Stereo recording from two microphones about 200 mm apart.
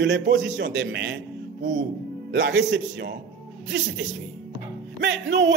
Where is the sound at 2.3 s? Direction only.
65° right (ahead or behind).